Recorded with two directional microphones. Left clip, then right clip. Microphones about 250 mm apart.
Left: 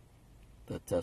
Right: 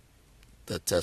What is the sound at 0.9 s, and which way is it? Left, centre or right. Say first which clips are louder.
Mantra: right 6 dB; right.